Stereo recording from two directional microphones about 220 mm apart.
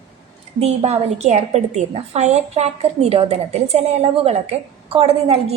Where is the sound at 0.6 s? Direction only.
30° right (ahead or behind).